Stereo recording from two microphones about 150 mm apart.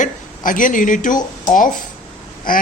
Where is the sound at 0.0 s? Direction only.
60° left (ahead or behind).